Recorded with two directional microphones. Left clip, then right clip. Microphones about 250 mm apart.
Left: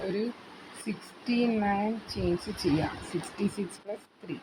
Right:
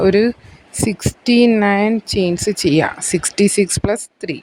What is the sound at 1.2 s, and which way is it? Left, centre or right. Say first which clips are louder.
Speech: right 16 dB; right.